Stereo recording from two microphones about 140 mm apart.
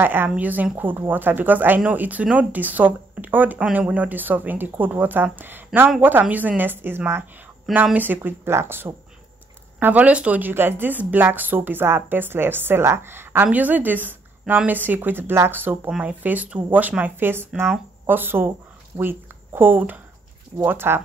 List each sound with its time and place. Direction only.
0.0 s speech: 15° right (ahead or behind)